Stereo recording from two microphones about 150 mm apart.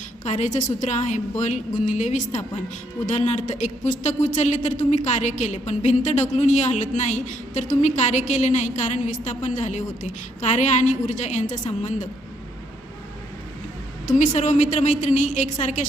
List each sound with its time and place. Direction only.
0.3 s a woman's voice: 50° left (ahead or behind)
14.1 s a woman's voice: 55° left (ahead or behind)